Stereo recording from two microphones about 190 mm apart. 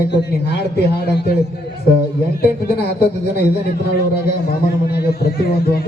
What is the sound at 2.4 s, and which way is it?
Speech, 60° left (ahead or behind).